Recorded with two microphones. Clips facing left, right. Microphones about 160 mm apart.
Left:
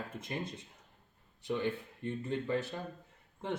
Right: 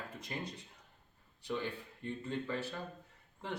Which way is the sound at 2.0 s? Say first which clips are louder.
Left 4 dB; 20° left (ahead or behind).